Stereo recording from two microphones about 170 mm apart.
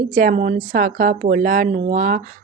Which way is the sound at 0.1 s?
50° right (ahead or behind).